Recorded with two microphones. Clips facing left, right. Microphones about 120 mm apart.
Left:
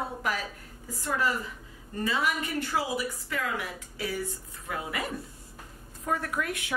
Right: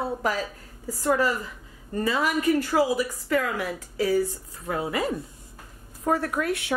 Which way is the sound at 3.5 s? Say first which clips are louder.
Right 7 dB; 35° right (ahead or behind).